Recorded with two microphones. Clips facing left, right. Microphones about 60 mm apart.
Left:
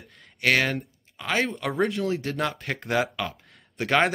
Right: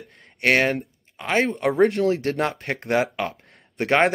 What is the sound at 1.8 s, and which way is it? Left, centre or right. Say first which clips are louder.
Speech: right 6 dB; right.